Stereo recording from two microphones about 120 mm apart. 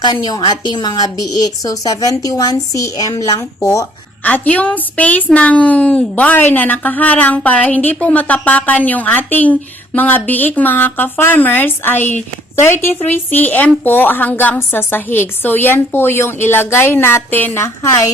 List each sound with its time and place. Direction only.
0.0 s a woman's voice: 35° left (ahead or behind)
4.2 s a woman's voice: 10° left (ahead or behind)